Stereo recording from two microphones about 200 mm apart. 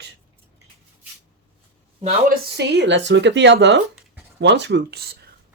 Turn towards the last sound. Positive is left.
turn(degrees=-55)  # may be behind; listen again after turning